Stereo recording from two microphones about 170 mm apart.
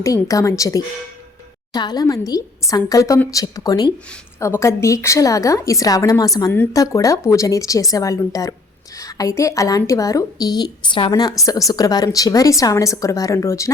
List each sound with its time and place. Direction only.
0.0 s a woman's voice: 20° left (ahead or behind)